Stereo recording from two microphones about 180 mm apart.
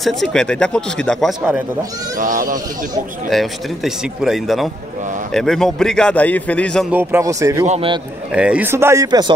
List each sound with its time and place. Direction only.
0.0 s a man's voice: centre (ahead or behind)
2.1 s speech: 45° right (ahead or behind)
3.3 s a man's voice: centre (ahead or behind)
6.9 s speech: 10° right (ahead or behind)
7.6 s a man's voice: 40° right (ahead or behind)
8.3 s speech: 5° right (ahead or behind)